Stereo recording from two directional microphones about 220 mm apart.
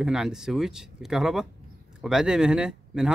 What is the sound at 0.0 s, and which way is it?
Speech, 5° right (ahead or behind).